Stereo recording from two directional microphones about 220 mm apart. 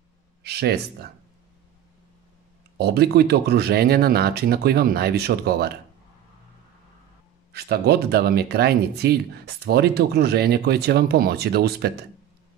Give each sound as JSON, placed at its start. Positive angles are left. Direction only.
{"t": 0.4, "sound": "speech", "side_deg": -45}
{"t": 2.8, "sound": "speech", "side_deg": -45}
{"t": 7.5, "sound": "speech", "side_deg": -45}